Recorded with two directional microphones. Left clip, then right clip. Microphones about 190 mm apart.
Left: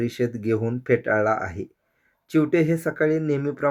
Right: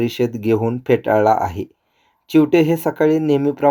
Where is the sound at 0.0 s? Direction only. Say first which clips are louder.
Right 6 dB; 20° right (ahead or behind).